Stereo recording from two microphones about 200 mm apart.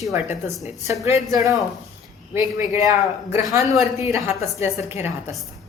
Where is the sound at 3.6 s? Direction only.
Centre (ahead or behind).